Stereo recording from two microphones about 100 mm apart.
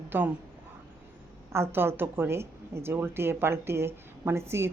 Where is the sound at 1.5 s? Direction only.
25° right (ahead or behind).